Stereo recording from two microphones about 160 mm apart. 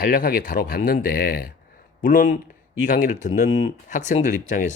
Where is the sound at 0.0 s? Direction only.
65° left (ahead or behind).